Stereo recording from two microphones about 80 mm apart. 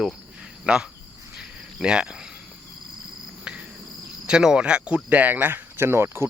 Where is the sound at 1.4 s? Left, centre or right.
Centre.